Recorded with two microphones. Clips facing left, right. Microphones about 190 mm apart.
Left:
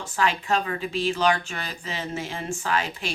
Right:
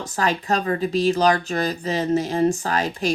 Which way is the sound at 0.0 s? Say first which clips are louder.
Right 2 dB; 40° right (ahead or behind).